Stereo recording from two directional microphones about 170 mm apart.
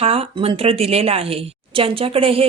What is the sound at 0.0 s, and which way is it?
A woman's voice, 35° right (ahead or behind).